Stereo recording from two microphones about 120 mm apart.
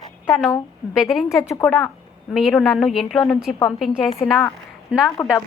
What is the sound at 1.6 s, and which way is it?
A woman's voice, 10° left (ahead or behind).